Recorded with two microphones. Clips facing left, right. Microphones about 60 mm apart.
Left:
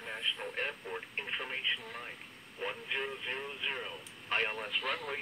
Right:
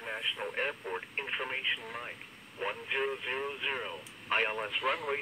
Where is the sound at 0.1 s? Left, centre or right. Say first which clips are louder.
Right 2 dB; centre.